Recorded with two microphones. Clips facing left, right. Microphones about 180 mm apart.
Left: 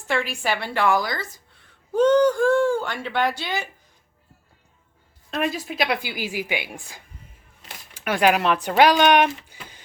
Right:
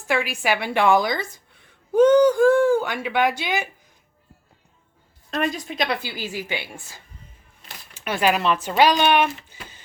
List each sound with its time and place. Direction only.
0.1 s a woman's voice: 10° right (ahead or behind)
5.3 s a woman's voice: 5° left (ahead or behind)